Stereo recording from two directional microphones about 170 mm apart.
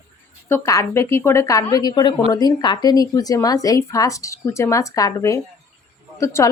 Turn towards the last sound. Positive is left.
turn(degrees=15)  # may be behind; listen again after turning